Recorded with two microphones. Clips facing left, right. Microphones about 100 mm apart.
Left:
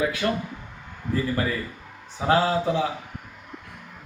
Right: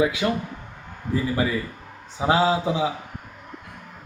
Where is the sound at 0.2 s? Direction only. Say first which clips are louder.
Right 1 dB; 20° right (ahead or behind).